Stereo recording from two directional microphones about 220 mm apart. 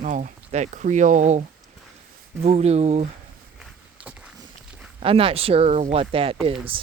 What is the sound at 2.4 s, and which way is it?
Speech, 30° right (ahead or behind).